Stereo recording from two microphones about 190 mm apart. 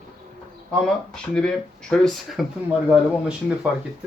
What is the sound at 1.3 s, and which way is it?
Speech, 5° left (ahead or behind).